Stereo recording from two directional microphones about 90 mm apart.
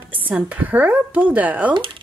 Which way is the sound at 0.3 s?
15° right (ahead or behind).